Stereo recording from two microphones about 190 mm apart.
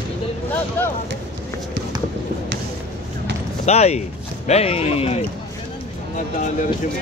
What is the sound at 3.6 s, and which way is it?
Speech, 35° left (ahead or behind).